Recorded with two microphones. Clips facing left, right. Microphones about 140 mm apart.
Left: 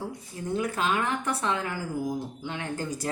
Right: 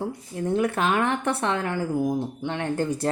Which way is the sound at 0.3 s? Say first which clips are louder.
Right 5 dB; 60° right (ahead or behind).